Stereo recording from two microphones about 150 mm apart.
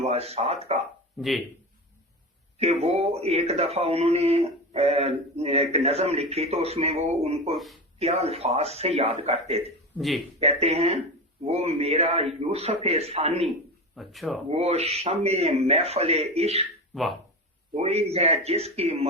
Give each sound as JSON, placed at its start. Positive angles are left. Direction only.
{"t": 0.1, "sound": "speech", "side_deg": -45}
{"t": 1.2, "sound": "speech", "side_deg": 0}
{"t": 2.6, "sound": "speech", "side_deg": -45}
{"t": 7.5, "sound": "speech", "side_deg": 0}
{"t": 7.9, "sound": "speech", "side_deg": -45}
{"t": 13.9, "sound": "speech", "side_deg": 0}
{"t": 14.5, "sound": "speech", "side_deg": -45}
{"t": 16.9, "sound": "speech", "side_deg": 0}
{"t": 17.7, "sound": "speech", "side_deg": -45}